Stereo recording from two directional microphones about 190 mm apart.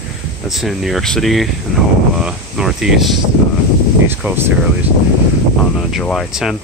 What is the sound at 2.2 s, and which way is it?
Cricket, 5° right (ahead or behind).